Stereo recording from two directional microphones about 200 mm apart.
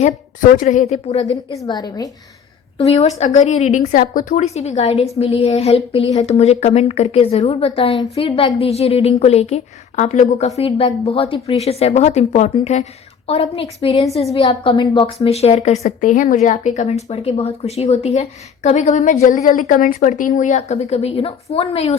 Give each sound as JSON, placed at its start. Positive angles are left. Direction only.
{"t": 0.5, "sound": "a woman's voice", "side_deg": 40}
{"t": 1.5, "sound": "a woman's voice", "side_deg": 20}
{"t": 2.7, "sound": "a woman's voice", "side_deg": 30}